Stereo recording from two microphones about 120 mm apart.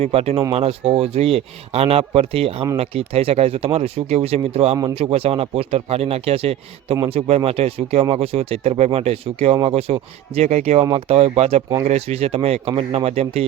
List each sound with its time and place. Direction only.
0.0 s speech: 55° right (ahead or behind)